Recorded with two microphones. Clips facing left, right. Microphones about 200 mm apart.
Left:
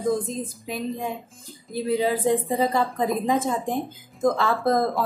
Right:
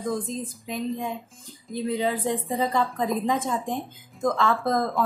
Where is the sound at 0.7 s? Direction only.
5° left (ahead or behind).